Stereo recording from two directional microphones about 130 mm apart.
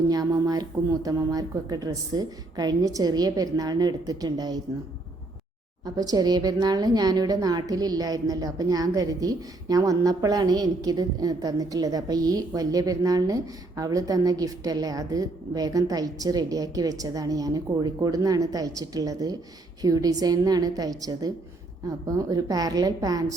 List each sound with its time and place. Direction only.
0.1 s a woman's voice: 30° right (ahead or behind)
5.8 s a woman's voice: 30° right (ahead or behind)